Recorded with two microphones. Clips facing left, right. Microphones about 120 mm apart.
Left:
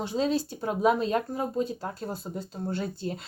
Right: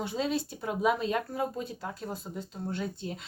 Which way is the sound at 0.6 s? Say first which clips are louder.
Left 4 dB; 40° left (ahead or behind).